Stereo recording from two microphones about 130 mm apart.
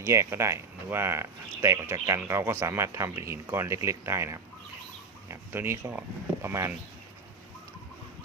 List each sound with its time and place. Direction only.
0.0 s speech: 20° right (ahead or behind)